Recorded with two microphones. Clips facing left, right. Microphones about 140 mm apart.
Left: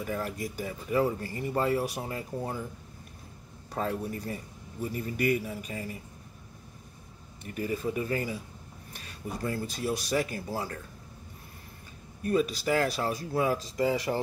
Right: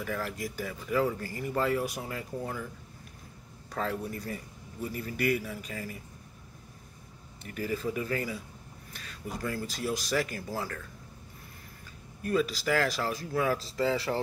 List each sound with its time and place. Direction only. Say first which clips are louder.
0.0 s speech: left 1 dB; 25° left (ahead or behind)
3.8 s speech: left 1 dB; 25° left (ahead or behind)
7.4 s speech: left 1 dB; 20° left (ahead or behind)
12.3 s speech: left 1 dB; 30° left (ahead or behind)
12.7 s speech: left 1 dB; 20° left (ahead or behind)